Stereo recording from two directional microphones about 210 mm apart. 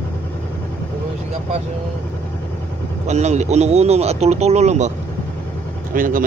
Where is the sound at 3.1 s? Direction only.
30° right (ahead or behind).